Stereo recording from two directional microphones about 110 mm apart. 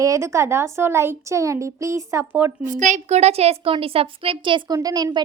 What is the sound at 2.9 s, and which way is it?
A woman's voice, 85° right.